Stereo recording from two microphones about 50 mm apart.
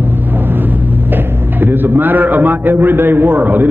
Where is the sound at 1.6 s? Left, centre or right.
Right.